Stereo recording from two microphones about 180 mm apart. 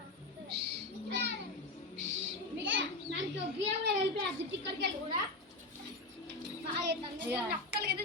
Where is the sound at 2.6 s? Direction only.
90° right.